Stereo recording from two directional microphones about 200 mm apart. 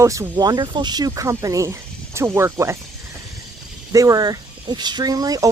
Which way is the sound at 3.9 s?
15° right (ahead or behind).